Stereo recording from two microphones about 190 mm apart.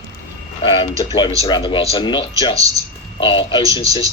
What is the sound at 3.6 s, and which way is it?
Speech, 15° right (ahead or behind).